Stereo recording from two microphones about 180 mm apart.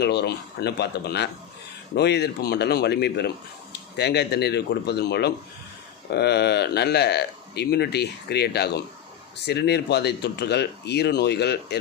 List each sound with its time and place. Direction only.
0.0 s speech: 65° left (ahead or behind)